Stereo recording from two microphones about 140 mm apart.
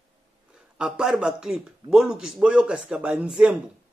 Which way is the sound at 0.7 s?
5° right (ahead or behind).